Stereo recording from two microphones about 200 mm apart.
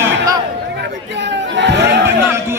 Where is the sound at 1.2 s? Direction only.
60° right (ahead or behind).